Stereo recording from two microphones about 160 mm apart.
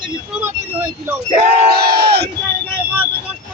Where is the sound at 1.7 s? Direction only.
85° right.